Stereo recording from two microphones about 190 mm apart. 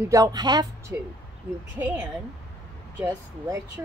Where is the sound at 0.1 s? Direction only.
20° right (ahead or behind).